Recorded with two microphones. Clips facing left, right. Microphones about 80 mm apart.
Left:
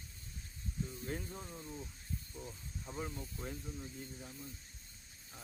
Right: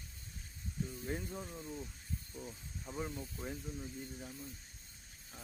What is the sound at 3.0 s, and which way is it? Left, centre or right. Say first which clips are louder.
Snake: right 1 dB; centre.